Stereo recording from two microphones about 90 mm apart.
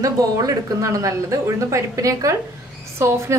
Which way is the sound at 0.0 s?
40° right (ahead or behind).